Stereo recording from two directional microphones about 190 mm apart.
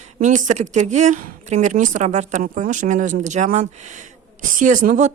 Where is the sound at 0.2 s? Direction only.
40° right (ahead or behind).